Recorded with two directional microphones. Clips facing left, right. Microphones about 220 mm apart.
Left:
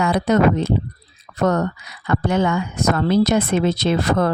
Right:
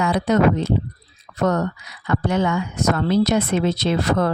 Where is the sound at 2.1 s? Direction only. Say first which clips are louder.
Left 1 dB; 50° left (ahead or behind).